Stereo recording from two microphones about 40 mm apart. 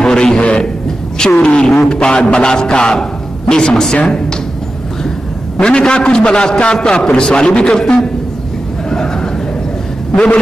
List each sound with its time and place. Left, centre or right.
0.0 s a man's voice: centre
5.6 s a man's voice: left
10.1 s a man's voice: left